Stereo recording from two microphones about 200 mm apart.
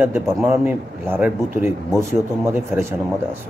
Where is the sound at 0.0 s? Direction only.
10° right (ahead or behind).